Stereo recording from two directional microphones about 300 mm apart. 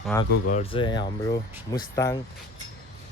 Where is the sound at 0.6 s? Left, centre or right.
Centre.